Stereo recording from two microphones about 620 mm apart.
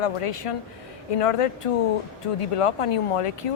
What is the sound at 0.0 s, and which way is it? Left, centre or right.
Speech, left.